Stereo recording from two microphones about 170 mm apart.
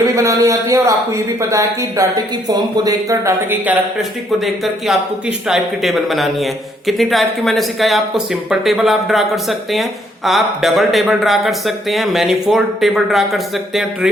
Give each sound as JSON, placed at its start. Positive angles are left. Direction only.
{"t": 0.2, "sound": "speech", "side_deg": -20}
{"t": 4.4, "sound": "a man's voice", "side_deg": 0}